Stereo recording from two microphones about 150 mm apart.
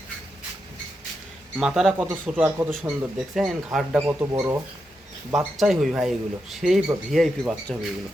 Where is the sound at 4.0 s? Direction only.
15° right (ahead or behind).